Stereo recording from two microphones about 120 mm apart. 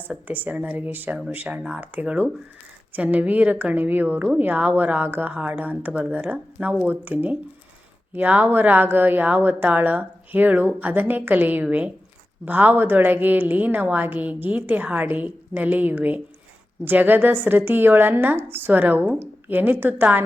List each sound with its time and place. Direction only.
0.1 s a woman's voice: 15° right (ahead or behind)